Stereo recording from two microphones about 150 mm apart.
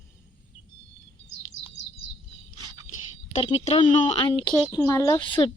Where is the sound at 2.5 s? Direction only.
30° right (ahead or behind).